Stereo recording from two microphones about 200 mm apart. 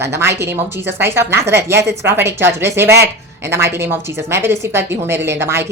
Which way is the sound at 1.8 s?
55° right (ahead or behind).